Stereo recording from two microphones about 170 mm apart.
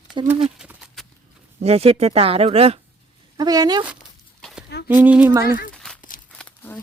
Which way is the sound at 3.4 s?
25° right (ahead or behind).